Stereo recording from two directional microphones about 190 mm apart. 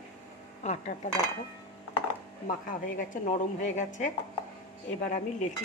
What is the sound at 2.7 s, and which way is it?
A woman's voice, 45° left (ahead or behind).